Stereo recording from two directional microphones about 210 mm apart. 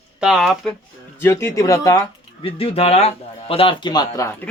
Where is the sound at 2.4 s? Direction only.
25° left (ahead or behind).